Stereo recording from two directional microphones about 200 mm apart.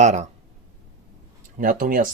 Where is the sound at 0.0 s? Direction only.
35° right (ahead or behind).